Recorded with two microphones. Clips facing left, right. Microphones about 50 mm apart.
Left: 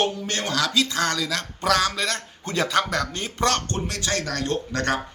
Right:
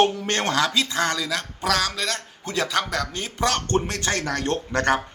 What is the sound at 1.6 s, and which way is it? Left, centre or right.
A man's voice, centre.